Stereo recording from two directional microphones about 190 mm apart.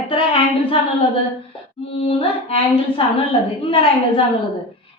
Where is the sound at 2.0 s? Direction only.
30° left (ahead or behind).